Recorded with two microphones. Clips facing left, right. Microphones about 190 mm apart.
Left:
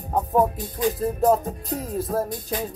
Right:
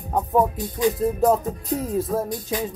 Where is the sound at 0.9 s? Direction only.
Centre (ahead or behind).